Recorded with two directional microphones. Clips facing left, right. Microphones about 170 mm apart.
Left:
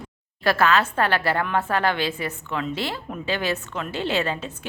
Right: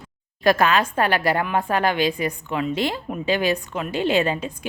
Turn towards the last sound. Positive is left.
turn(degrees=-15)  # may be behind; listen again after turning